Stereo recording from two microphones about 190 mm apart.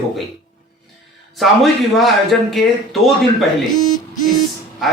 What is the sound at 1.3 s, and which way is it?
A man's voice, centre (ahead or behind).